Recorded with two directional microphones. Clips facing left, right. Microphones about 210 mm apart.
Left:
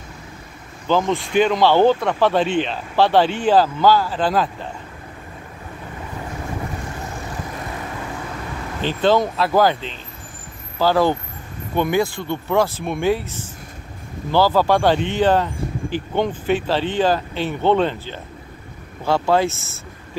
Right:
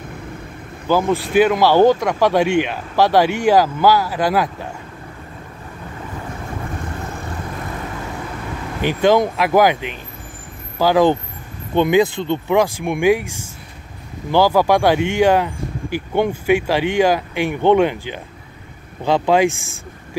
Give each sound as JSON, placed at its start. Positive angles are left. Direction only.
{"t": 0.8, "sound": "speech", "side_deg": -10}
{"t": 8.8, "sound": "speech", "side_deg": -15}